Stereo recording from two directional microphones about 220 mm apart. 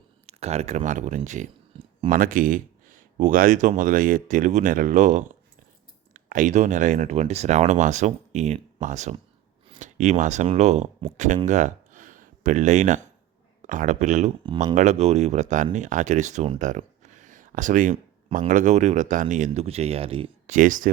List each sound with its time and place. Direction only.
0.3 s speech: 30° right (ahead or behind)
20.6 s speech: 35° right (ahead or behind)